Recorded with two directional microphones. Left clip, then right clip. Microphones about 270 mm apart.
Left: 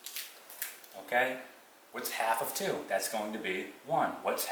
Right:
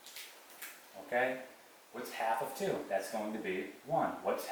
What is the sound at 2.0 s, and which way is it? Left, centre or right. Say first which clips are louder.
Speech: left 3 dB; centre.